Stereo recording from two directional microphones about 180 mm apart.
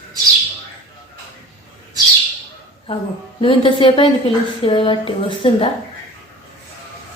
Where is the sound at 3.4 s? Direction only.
30° left (ahead or behind).